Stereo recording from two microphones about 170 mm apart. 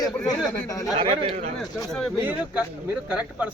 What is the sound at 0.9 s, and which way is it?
Speech, 35° right (ahead or behind).